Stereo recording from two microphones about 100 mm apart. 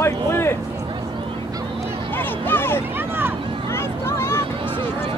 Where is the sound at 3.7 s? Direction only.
25° left (ahead or behind).